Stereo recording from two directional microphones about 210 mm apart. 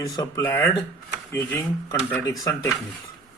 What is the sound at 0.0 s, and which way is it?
A man's voice, 15° left (ahead or behind).